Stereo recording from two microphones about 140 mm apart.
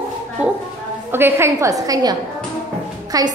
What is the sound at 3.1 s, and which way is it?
Speech, 25° right (ahead or behind).